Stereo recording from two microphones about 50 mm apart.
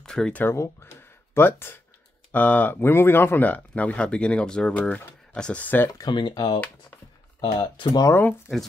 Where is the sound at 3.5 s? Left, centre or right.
Left.